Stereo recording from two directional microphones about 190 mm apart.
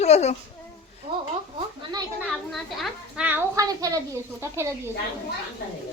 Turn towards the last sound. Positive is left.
turn(degrees=-15)  # may be behind; listen again after turning